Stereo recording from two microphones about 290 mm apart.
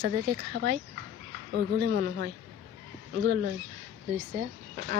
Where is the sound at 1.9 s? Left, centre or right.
Right.